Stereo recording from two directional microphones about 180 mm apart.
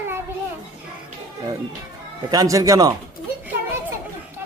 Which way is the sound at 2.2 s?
20° right (ahead or behind).